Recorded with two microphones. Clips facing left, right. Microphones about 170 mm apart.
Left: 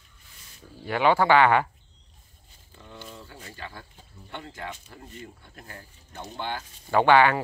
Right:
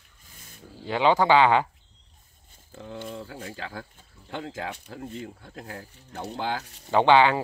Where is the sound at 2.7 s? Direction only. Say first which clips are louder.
Right 8 dB; 90° right.